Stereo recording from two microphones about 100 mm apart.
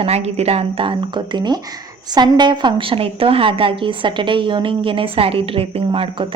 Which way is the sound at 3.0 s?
65° right (ahead or behind).